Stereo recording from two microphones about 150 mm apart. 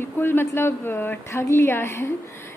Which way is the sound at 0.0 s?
15° left (ahead or behind).